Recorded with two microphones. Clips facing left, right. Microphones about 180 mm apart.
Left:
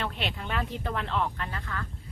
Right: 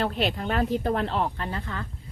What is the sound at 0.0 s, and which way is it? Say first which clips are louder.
Speech: right 7 dB; 40° right (ahead or behind).